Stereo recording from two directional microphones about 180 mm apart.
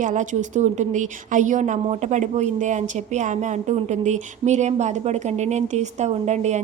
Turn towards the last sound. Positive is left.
turn(degrees=-40)  # may be behind; listen again after turning